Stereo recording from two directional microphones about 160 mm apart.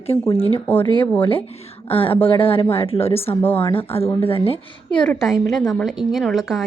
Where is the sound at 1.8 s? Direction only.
35° left (ahead or behind).